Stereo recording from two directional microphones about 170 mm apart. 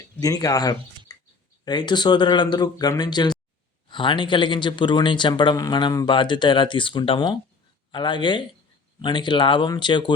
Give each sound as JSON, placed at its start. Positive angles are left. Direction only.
{"t": 0.2, "sound": "speech", "side_deg": 20}